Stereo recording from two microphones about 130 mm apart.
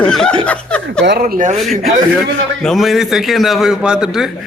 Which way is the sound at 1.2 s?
85° right.